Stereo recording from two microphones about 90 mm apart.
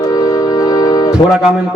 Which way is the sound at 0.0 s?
40° left (ahead or behind).